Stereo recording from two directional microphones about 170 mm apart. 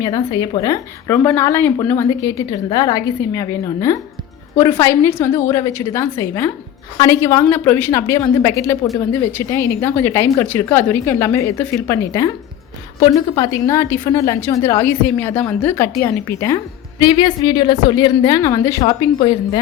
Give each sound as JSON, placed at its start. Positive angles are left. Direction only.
{"t": 0.0, "sound": "a woman's voice", "side_deg": 20}